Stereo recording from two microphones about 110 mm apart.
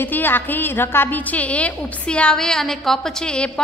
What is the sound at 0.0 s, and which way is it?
A woman's voice, 15° left (ahead or behind).